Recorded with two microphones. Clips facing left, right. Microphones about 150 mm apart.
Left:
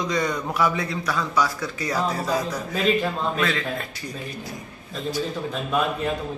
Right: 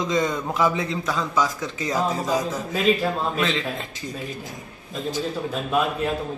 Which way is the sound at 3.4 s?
20° right (ahead or behind).